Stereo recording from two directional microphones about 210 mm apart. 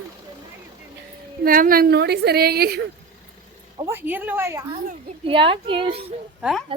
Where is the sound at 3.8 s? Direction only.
10° right (ahead or behind).